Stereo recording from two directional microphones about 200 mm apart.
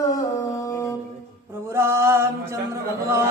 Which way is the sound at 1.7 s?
15° right (ahead or behind).